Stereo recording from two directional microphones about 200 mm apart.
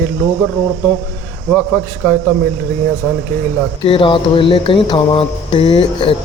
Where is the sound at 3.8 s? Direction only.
25° left (ahead or behind).